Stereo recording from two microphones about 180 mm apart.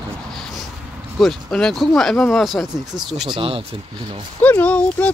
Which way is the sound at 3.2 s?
30° right (ahead or behind).